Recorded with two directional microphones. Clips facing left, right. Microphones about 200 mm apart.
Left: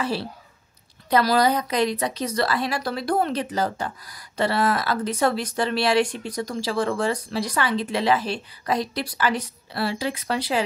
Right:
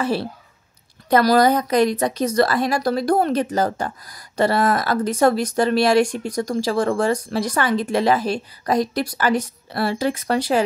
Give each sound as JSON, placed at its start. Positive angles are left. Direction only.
{"t": 0.0, "sound": "a woman's voice", "side_deg": -50}